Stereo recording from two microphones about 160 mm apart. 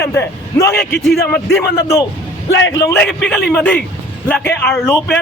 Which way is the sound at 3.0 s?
5° left (ahead or behind).